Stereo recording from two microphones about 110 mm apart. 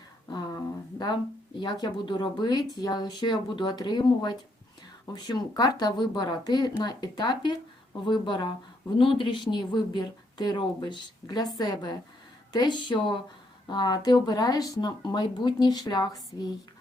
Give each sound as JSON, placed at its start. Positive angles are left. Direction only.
{"t": 0.3, "sound": "speech", "side_deg": 40}